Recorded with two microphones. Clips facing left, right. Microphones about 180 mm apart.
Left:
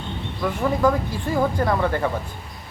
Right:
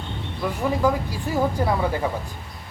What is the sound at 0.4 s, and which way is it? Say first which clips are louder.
Speech: left 2 dB; 10° right (ahead or behind).